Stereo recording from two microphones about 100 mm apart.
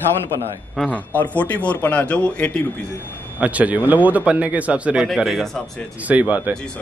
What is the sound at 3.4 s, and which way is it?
A man's voice, 15° right (ahead or behind).